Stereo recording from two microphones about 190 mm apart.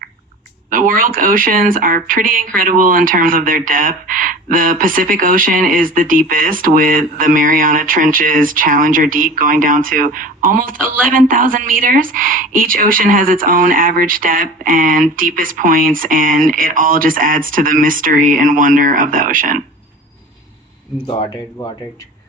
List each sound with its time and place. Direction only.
0.7 s speech: 45° right (ahead or behind)
21.1 s speech: 25° left (ahead or behind)